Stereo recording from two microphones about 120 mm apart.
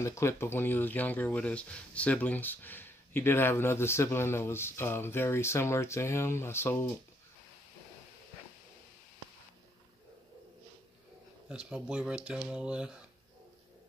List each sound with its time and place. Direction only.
0.0 s speech: 25° left (ahead or behind)
11.4 s speech: 5° right (ahead or behind)